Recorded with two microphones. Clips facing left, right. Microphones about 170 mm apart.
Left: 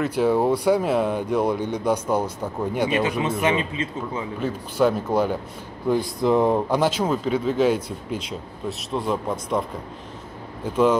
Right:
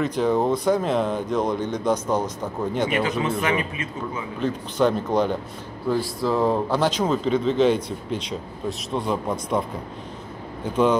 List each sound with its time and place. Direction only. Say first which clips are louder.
0.0 s speech: left 1 dB; 10° left (ahead or behind); by 4.2 s 25° left (ahead or behind)
4.4 s speech: even; 5° left (ahead or behind)
5.9 s speech: left 3 dB; 20° left (ahead or behind); by 11.0 s 5° left (ahead or behind)